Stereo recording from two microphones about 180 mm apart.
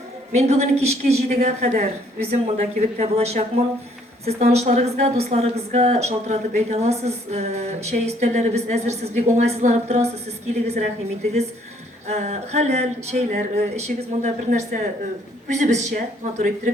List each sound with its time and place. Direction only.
0.3 s a woman's voice: 40° right (ahead or behind)
12.0 s a woman's voice: 40° right (ahead or behind)